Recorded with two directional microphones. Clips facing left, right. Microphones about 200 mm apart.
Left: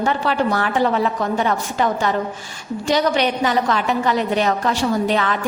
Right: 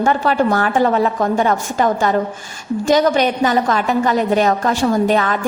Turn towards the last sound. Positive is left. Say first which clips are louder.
# right 4 dB
turn(degrees=-45)  # may be behind; listen again after turning